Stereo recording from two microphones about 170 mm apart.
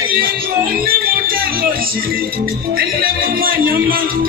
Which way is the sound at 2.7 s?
60° right (ahead or behind).